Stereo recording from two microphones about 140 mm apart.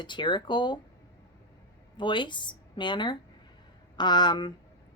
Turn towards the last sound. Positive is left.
turn(degrees=30)  # may be behind; listen again after turning